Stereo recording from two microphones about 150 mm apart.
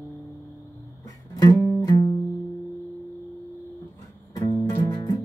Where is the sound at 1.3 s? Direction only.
25° left (ahead or behind).